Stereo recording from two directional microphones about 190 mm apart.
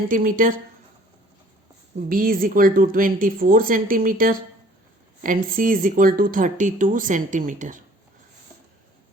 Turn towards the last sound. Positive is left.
turn(degrees=-40)  # may be behind; listen again after turning